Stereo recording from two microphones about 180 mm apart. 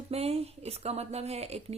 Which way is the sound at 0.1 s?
35° right (ahead or behind).